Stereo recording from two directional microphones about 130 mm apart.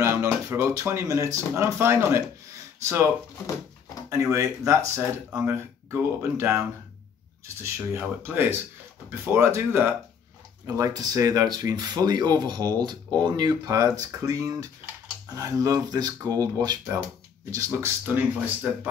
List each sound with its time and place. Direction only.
0.0 s speech: 20° right (ahead or behind)
4.1 s speech: 25° right (ahead or behind)
7.6 s speech: 20° right (ahead or behind)
10.8 s speech: 30° right (ahead or behind)